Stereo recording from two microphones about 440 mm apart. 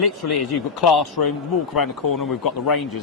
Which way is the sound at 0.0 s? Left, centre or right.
Left.